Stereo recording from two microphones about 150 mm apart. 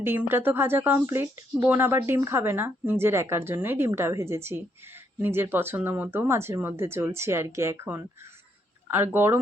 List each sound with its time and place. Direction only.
0.0 s a woman's voice: 15° right (ahead or behind)